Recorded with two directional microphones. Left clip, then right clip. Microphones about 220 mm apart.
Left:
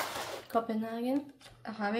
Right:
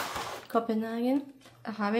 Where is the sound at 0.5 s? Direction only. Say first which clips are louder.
Right 3 dB; 30° right (ahead or behind).